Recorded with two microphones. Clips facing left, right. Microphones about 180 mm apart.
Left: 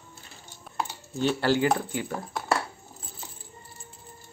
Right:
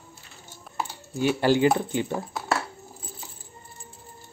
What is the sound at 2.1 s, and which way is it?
Speech, centre (ahead or behind).